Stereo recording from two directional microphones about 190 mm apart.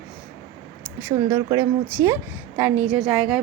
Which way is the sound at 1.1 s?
15° right (ahead or behind).